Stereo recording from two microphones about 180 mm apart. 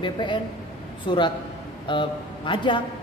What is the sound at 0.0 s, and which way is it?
A woman's voice, 25° left (ahead or behind).